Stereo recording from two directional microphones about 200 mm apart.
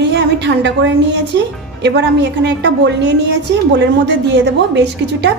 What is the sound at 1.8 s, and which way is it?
A woman's voice, 60° right (ahead or behind).